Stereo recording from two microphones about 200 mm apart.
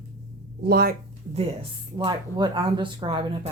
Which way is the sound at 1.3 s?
30° right (ahead or behind).